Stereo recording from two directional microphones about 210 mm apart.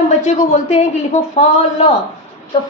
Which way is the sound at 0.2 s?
35° left (ahead or behind).